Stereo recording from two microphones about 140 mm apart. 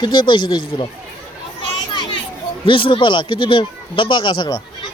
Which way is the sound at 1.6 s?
35° left (ahead or behind).